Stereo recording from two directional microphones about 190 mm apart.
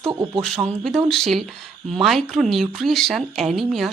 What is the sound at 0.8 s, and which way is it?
Speech, centre (ahead or behind).